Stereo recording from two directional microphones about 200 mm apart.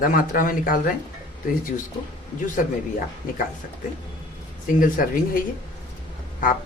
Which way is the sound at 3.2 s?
40° left (ahead or behind).